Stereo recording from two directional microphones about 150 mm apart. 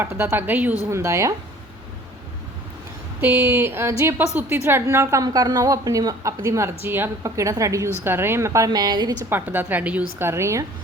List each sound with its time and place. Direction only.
0.0 s a woman's voice: 15° right (ahead or behind)
3.2 s a woman's voice: 15° right (ahead or behind)
9.3 s a woman's voice: 15° right (ahead or behind)